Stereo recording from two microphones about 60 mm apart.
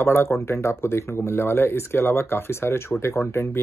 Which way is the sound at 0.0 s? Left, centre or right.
Left.